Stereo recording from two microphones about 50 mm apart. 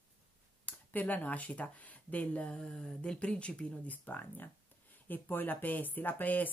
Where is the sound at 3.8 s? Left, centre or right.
Left.